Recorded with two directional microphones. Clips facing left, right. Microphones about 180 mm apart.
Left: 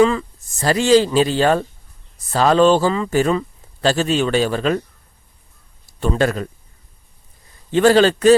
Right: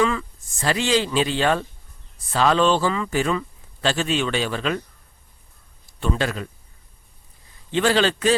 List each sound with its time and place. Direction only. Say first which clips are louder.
0.0 s speech: left 7 dB; 35° left (ahead or behind)
5.8 s a man's voice: left 6 dB; 40° left (ahead or behind)
7.7 s a man's voice: left 7 dB; 45° left (ahead or behind)